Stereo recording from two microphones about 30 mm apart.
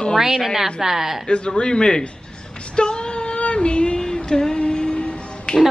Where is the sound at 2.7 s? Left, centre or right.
Left.